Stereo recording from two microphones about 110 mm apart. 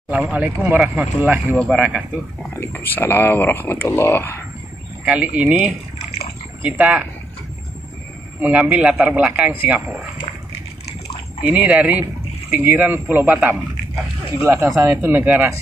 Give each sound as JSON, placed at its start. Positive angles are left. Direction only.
{"t": 0.1, "sound": "speech", "side_deg": -15}
{"t": 2.5, "sound": "speech", "side_deg": 20}
{"t": 5.0, "sound": "speech", "side_deg": -5}
{"t": 8.4, "sound": "speech", "side_deg": -15}
{"t": 11.4, "sound": "speech", "side_deg": -15}